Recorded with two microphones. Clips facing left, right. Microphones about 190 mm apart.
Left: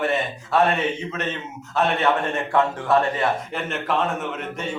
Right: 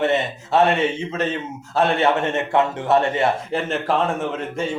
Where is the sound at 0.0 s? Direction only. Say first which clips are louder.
Right 3 dB; 25° right (ahead or behind).